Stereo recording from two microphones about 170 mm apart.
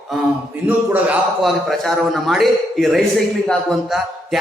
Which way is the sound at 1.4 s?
Centre (ahead or behind).